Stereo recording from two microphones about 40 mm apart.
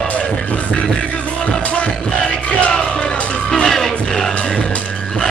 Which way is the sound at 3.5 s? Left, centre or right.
Centre.